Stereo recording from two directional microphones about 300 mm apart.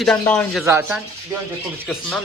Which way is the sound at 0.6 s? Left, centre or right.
Centre.